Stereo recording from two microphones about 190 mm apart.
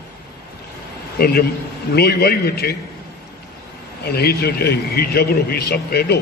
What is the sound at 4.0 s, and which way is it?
A man's voice, 55° left (ahead or behind).